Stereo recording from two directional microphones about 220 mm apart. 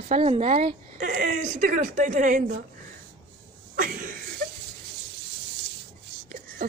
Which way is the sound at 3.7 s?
35° right (ahead or behind).